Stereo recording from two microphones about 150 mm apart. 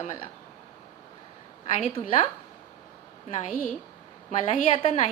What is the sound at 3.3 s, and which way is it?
Speech, 55° left (ahead or behind).